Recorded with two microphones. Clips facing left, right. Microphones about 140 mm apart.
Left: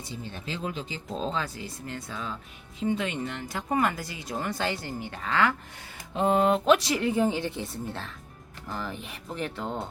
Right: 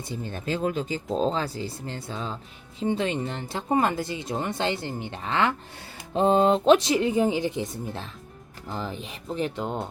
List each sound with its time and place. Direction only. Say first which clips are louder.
0.1 s speech: right 7 dB; 50° right (ahead or behind); by 9.8 s 20° right (ahead or behind)